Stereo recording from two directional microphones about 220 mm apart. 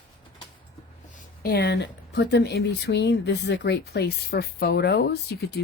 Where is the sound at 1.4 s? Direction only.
45° left (ahead or behind).